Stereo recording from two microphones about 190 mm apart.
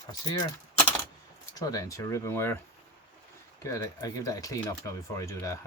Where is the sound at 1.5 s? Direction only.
20° left (ahead or behind).